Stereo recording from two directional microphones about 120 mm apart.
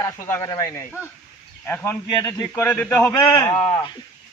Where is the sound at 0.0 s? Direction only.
25° left (ahead or behind).